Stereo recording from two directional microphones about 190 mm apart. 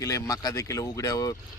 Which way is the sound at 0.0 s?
20° left (ahead or behind).